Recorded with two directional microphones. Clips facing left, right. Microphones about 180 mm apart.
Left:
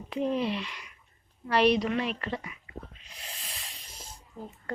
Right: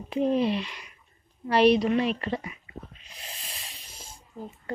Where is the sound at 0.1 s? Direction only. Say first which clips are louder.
Right 5 dB; 25° right (ahead or behind).